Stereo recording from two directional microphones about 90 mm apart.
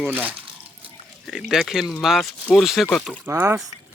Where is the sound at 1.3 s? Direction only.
5° right (ahead or behind).